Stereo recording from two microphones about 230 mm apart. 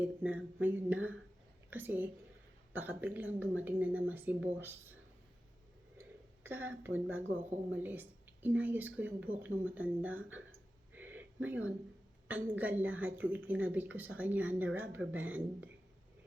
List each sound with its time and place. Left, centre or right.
0.0 s a woman's voice: centre
6.4 s a woman's voice: centre
10.9 s a sound: centre
11.4 s a woman's voice: centre